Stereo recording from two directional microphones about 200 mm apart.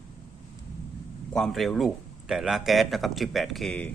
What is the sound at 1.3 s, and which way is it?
Speech, centre (ahead or behind).